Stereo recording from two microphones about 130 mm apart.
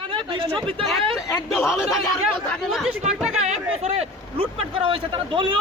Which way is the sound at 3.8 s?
50° right (ahead or behind).